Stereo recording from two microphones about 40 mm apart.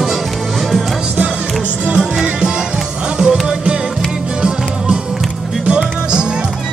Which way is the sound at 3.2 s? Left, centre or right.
Centre.